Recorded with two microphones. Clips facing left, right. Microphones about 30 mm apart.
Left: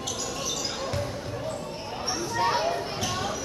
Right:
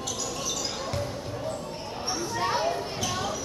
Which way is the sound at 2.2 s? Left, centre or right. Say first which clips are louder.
Left 2 dB; centre.